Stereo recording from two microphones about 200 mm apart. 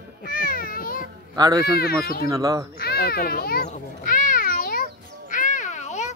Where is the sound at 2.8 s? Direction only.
55° left (ahead or behind).